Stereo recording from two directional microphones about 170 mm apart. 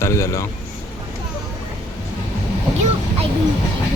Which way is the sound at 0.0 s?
15° left (ahead or behind).